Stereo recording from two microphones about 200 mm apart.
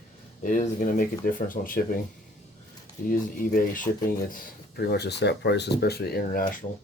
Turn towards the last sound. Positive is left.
turn(degrees=45)  # may be behind; listen again after turning